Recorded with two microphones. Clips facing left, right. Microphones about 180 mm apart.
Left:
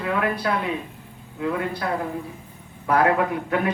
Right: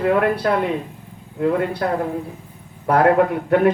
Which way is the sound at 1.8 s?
50° right (ahead or behind).